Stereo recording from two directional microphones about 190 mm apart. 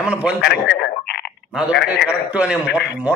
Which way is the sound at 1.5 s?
5° right (ahead or behind).